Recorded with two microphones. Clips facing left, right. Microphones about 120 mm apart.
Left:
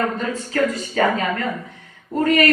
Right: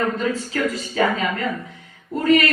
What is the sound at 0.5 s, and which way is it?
Speech, 40° left (ahead or behind).